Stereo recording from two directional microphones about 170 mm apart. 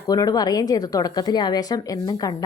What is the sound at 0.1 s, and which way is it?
A woman's voice, 20° left (ahead or behind).